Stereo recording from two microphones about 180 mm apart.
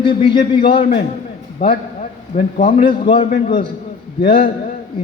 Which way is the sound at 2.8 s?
30° left (ahead or behind).